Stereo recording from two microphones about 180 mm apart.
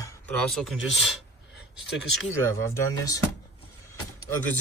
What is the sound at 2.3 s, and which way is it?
Speech, 15° left (ahead or behind).